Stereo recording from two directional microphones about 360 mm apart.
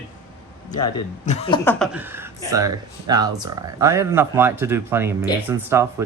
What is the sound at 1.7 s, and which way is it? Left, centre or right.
Speech, centre.